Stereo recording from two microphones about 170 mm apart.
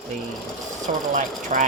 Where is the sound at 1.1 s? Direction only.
50° right (ahead or behind).